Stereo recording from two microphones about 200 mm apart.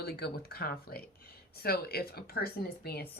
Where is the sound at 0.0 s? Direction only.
50° left (ahead or behind).